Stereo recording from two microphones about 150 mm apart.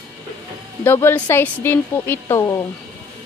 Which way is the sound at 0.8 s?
15° left (ahead or behind).